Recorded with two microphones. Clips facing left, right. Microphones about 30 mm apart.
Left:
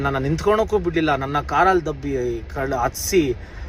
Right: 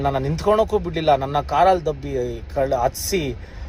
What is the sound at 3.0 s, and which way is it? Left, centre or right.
Speech, right.